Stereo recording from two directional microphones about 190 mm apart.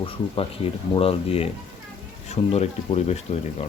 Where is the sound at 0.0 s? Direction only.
30° left (ahead or behind).